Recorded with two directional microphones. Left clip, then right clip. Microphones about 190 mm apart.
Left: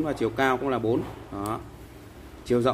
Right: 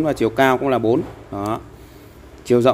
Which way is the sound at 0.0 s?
45° right (ahead or behind).